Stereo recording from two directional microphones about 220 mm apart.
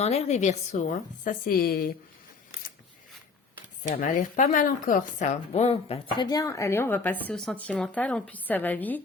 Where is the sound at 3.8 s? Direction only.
40° left (ahead or behind).